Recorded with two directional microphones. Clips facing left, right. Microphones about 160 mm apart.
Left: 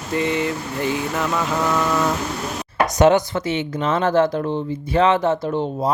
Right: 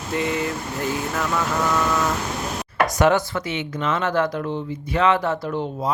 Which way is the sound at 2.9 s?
20° left (ahead or behind).